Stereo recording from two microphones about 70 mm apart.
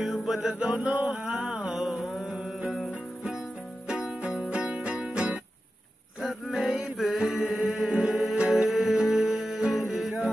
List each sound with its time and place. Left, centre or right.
0.0 s music: centre
4.2 s music: centre
6.2 s music: centre